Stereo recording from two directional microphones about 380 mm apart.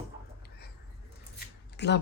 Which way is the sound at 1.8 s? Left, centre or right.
Left.